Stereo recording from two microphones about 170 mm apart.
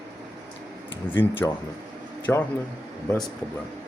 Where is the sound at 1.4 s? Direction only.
10° left (ahead or behind).